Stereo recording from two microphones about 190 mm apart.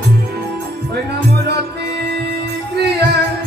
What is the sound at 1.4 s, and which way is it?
Music, 60° right (ahead or behind).